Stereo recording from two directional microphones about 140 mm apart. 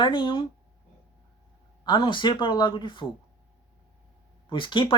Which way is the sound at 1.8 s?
35° left (ahead or behind).